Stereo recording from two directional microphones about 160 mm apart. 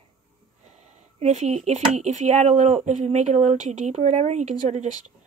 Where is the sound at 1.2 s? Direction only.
45° right (ahead or behind).